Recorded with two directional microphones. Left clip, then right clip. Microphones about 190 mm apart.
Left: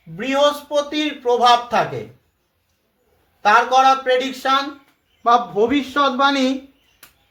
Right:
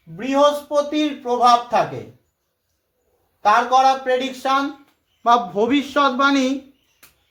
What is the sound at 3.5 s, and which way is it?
A man's voice, 10° right (ahead or behind).